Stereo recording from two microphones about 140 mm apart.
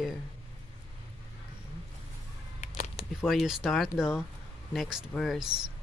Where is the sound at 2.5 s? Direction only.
55° left (ahead or behind).